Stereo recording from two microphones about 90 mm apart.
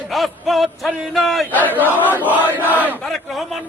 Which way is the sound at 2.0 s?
20° right (ahead or behind).